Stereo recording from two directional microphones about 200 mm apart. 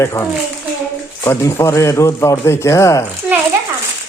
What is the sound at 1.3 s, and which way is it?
Speech, 15° left (ahead or behind).